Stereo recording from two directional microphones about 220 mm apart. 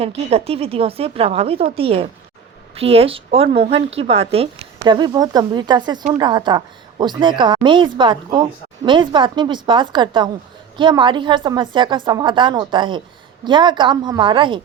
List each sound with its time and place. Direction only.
0.3 s a woman's voice: 25° right (ahead or behind)